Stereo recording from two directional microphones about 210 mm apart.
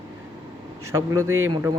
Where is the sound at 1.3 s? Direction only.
75° right (ahead or behind).